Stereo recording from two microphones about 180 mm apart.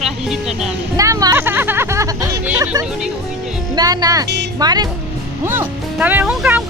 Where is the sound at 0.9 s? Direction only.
20° right (ahead or behind).